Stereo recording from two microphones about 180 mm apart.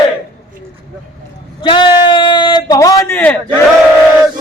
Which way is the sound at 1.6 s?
25° left (ahead or behind).